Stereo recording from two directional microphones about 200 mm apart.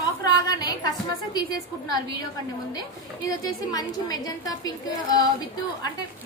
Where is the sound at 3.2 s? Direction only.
20° left (ahead or behind).